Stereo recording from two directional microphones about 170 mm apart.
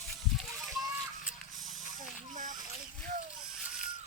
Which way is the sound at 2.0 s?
50° right (ahead or behind).